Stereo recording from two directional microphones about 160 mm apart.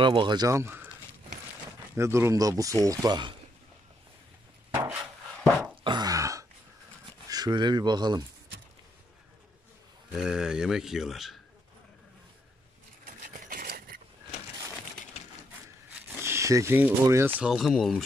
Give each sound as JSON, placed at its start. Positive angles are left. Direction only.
{"t": 0.0, "sound": "speech", "side_deg": -30}
{"t": 2.0, "sound": "speech", "side_deg": -15}
{"t": 5.9, "sound": "throat clearing", "side_deg": -25}
{"t": 7.2, "sound": "speech", "side_deg": -25}
{"t": 10.1, "sound": "speech", "side_deg": -5}
{"t": 13.0, "sound": "a sound", "side_deg": -60}
{"t": 15.9, "sound": "a sound", "side_deg": -15}
{"t": 17.4, "sound": "speech", "side_deg": 0}